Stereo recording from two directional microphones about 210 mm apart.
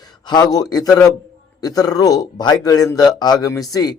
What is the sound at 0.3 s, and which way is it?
A man's voice, 20° left (ahead or behind).